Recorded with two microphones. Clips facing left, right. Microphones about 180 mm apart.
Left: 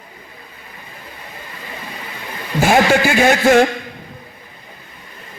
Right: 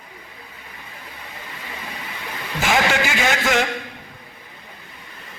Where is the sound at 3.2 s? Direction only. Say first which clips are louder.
Left 9 dB; 50° left (ahead or behind).